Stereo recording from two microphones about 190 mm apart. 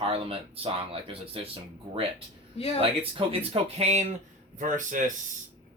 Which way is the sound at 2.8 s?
30° right (ahead or behind).